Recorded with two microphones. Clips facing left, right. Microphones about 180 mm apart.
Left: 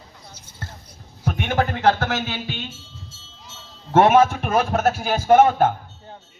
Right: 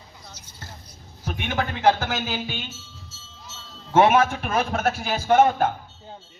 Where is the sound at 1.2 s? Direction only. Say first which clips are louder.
Left 5 dB; 50° left (ahead or behind).